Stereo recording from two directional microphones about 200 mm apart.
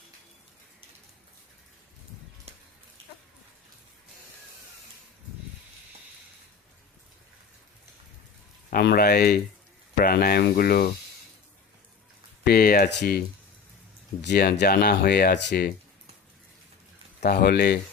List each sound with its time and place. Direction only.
8.7 s speech: 55° left (ahead or behind)
12.5 s speech: 50° left (ahead or behind)
17.2 s speech: 55° left (ahead or behind)